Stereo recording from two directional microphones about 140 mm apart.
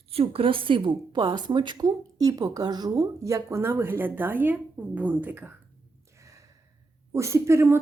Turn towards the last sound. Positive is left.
turn(degrees=-20)  # may be behind; listen again after turning